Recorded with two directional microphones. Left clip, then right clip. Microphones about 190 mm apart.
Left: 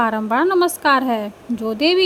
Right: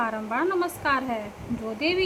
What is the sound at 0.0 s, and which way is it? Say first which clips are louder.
A woman's voice: left 9 dB; 40° left (ahead or behind).